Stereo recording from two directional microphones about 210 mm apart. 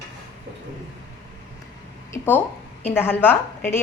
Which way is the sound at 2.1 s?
10° left (ahead or behind).